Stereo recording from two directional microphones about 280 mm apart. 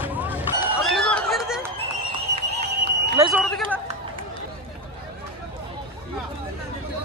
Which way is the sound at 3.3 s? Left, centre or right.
Centre.